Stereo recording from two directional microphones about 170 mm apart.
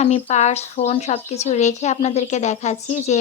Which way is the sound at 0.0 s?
40° left (ahead or behind).